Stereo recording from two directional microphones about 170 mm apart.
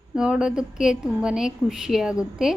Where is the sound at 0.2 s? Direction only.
5° right (ahead or behind).